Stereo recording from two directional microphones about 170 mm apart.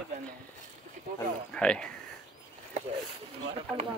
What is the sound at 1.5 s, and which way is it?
Speech, 5° left (ahead or behind).